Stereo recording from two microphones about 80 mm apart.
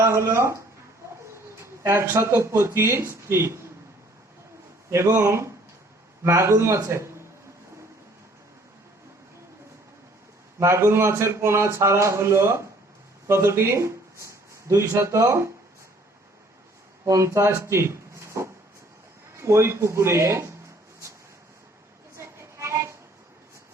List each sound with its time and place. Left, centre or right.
0.0 s speech: right
1.6 s speech: right
4.9 s speech: right
10.6 s speech: right
17.1 s speech: right
22.2 s music: right